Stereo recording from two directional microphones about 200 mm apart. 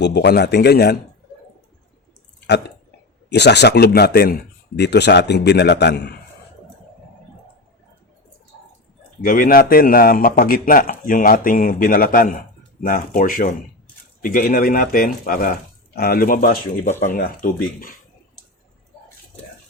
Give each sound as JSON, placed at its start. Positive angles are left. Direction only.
{"t": 0.0, "sound": "speech", "side_deg": 55}
{"t": 3.2, "sound": "a man's voice", "side_deg": 60}
{"t": 9.2, "sound": "speech", "side_deg": 45}